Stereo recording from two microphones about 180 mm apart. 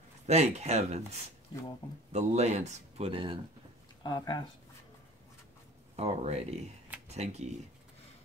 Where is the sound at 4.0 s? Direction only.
20° left (ahead or behind).